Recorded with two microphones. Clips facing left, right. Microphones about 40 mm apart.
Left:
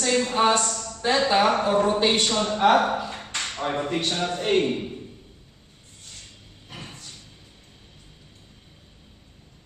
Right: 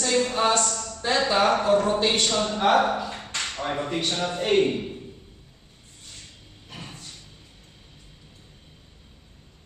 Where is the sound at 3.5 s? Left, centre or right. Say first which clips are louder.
Left 2 dB; centre.